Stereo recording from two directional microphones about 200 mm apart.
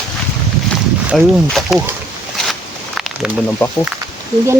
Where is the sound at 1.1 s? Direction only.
Centre (ahead or behind).